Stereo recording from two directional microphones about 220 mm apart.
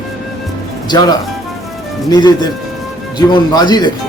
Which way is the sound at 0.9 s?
20° left (ahead or behind).